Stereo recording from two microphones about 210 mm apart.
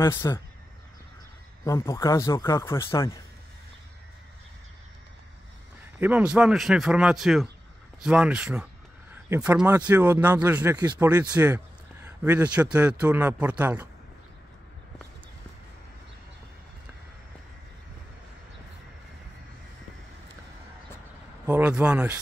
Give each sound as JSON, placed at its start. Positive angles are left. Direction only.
{"t": 0.0, "sound": "speech", "side_deg": 15}
{"t": 1.6, "sound": "speech", "side_deg": 15}
{"t": 5.9, "sound": "speech", "side_deg": -5}
{"t": 10.8, "sound": "speech", "side_deg": -20}
{"t": 11.1, "sound": "speech", "side_deg": -5}
{"t": 21.5, "sound": "speech", "side_deg": -10}